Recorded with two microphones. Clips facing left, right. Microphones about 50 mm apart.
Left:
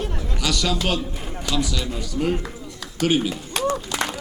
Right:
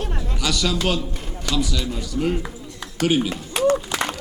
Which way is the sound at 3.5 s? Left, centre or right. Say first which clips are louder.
Right 5 dB; centre.